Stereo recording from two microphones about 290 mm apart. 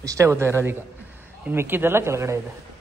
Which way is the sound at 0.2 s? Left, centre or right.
Centre.